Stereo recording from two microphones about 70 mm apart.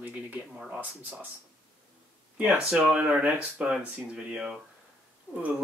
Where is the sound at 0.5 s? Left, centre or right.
Centre.